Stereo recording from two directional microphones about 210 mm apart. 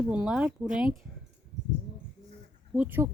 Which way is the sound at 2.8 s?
10° right (ahead or behind).